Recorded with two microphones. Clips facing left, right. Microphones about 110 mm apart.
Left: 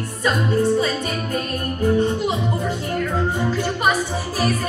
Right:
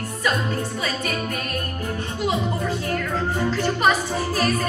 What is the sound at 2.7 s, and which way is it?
Music, 15° left (ahead or behind).